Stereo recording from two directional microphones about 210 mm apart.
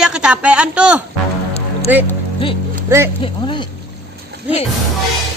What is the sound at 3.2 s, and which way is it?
Speech, 20° left (ahead or behind).